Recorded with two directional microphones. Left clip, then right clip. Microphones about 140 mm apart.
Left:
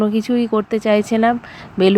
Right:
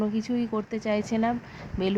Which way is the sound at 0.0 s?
35° left (ahead or behind).